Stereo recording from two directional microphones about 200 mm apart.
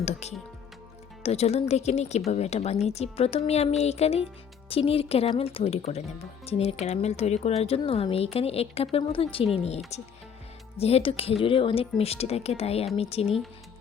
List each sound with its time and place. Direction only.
0.0 s speech: 35° left (ahead or behind)